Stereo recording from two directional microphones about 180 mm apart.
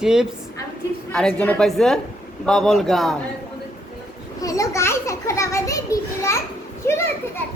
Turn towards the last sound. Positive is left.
turn(degrees=15)  # may be behind; listen again after turning